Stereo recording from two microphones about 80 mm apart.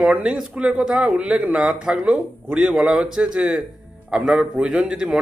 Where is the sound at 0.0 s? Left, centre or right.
Centre.